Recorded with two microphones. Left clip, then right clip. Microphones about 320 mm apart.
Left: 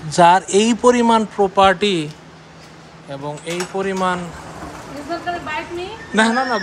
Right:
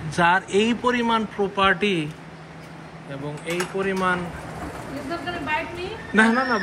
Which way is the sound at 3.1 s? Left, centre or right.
Centre.